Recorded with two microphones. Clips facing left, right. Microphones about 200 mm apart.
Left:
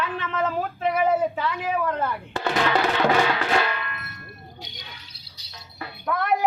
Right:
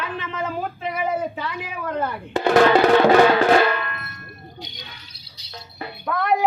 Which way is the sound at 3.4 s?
45° right (ahead or behind).